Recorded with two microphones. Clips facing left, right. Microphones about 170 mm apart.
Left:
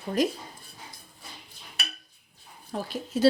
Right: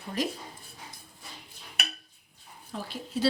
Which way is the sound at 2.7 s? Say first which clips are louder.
Left 5 dB; 45° left (ahead or behind).